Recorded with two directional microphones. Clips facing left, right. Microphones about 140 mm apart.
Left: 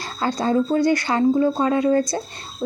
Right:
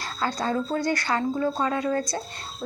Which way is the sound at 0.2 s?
20° left (ahead or behind).